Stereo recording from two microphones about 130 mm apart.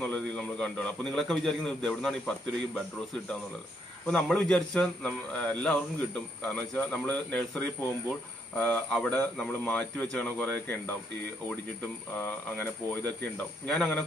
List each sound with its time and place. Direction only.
0.0 s a man's voice: 10° left (ahead or behind)
4.1 s a man's voice: 5° left (ahead or behind)
12.2 s a man's voice: 15° left (ahead or behind)